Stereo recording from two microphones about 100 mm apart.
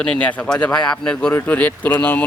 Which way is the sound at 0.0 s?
10° left (ahead or behind).